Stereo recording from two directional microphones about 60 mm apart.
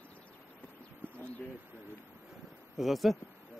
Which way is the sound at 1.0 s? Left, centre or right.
Right.